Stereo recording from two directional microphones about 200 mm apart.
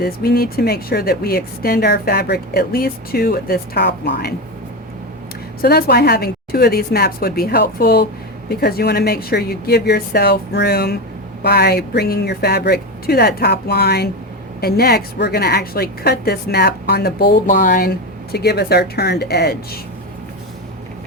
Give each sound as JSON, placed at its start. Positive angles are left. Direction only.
{"t": 0.0, "sound": "a woman's voice", "side_deg": 50}
{"t": 5.6, "sound": "a woman's voice", "side_deg": 55}